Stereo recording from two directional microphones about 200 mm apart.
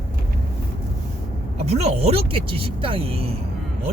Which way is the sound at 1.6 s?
30° right (ahead or behind).